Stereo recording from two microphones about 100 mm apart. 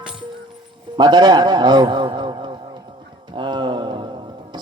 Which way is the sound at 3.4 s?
50° right (ahead or behind).